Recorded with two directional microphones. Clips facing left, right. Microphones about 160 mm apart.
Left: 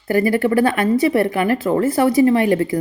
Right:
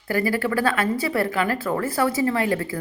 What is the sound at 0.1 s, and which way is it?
Speech, 20° left (ahead or behind).